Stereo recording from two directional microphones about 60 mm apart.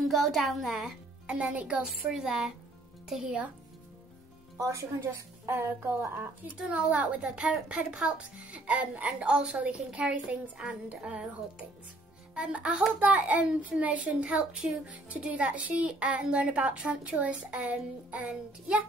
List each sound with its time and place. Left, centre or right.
0.1 s a child's voice: centre
1.4 s speech: right
1.8 s music: centre
3.1 s a child's voice: centre
4.6 s speech: right
5.5 s a woman's voice: right
6.9 s speech: right
10.6 s music: centre
12.4 s speech: centre